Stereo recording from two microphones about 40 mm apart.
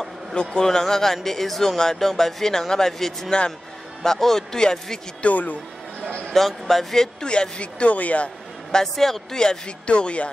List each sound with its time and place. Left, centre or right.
0.3 s a man's voice: left
3.3 s speech: left
4.0 s speech: centre
5.2 s speech: left
6.3 s speech: centre
7.2 s speech: left
8.9 s speech: centre
9.8 s speech: left